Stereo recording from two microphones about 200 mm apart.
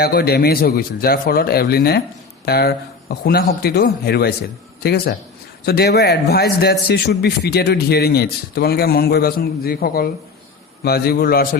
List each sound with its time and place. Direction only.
0.0 s a man's voice: 50° left (ahead or behind)